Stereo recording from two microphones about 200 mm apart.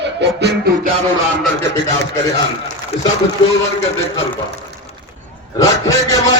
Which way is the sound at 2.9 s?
30° left (ahead or behind).